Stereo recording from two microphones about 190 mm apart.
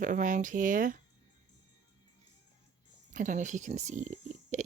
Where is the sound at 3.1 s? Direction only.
40° right (ahead or behind).